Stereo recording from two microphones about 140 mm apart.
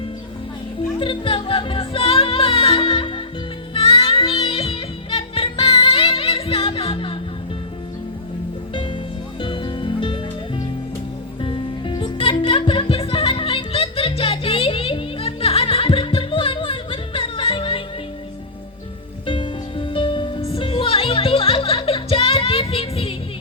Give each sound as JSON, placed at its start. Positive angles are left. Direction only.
{"t": 0.9, "sound": "music", "side_deg": 40}
{"t": 9.4, "sound": "music", "side_deg": 35}
{"t": 19.2, "sound": "music", "side_deg": 35}